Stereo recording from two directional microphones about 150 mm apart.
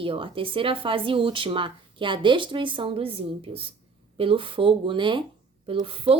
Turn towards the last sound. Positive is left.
turn(degrees=-40)  # may be behind; listen again after turning